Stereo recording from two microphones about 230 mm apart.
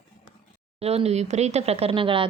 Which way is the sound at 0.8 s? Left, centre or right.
Right.